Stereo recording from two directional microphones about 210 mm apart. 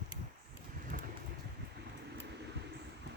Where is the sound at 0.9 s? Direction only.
40° right (ahead or behind).